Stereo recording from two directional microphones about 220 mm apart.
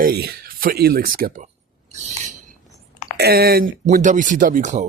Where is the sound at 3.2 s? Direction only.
45° right (ahead or behind).